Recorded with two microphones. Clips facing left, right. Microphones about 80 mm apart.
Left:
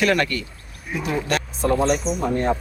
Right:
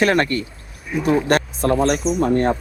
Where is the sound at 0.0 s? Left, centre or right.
Right.